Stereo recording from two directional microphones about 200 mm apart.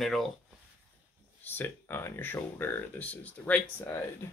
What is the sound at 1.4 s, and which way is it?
Speech, 10° left (ahead or behind).